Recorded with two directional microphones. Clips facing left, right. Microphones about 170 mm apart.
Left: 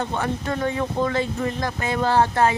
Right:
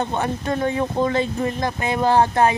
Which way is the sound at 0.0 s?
20° right (ahead or behind).